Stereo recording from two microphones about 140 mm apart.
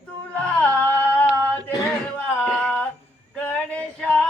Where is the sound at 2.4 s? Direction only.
5° left (ahead or behind).